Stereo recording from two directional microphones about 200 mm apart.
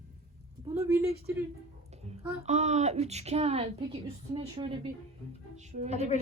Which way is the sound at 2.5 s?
35° right (ahead or behind).